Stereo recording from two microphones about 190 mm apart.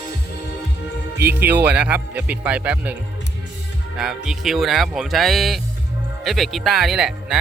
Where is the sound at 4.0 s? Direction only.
5° right (ahead or behind).